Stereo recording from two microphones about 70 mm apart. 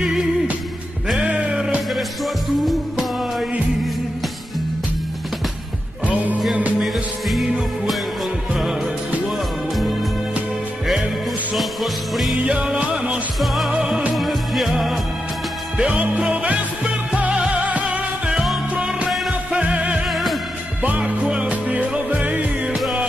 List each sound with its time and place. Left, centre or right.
1.2 s music: centre
6.0 s music: right
6.8 s music: centre
11.5 s music: centre
12.4 s music: centre
15.8 s music: centre
19.0 s music: centre
19.6 s music: centre
20.1 s music: centre
21.1 s music: centre